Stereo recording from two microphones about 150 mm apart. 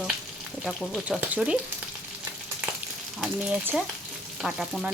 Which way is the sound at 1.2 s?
5° right (ahead or behind).